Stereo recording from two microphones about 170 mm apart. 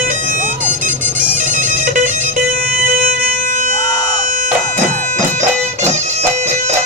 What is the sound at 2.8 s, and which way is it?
Music, 50° right (ahead or behind).